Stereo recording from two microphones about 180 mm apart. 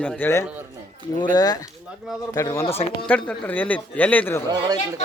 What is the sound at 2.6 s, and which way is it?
Speech, 35° left (ahead or behind).